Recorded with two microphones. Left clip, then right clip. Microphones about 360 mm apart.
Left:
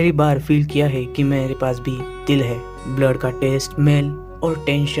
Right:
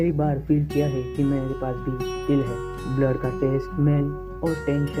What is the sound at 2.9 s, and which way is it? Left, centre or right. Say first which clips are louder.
Speech: left 6 dB; left.